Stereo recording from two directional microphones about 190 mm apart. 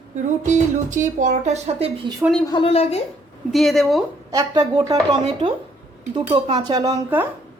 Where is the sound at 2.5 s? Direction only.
30° left (ahead or behind).